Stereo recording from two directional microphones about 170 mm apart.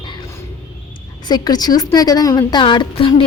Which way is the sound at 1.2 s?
25° left (ahead or behind).